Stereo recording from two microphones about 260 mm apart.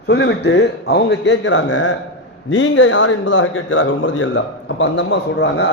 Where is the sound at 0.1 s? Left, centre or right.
Left.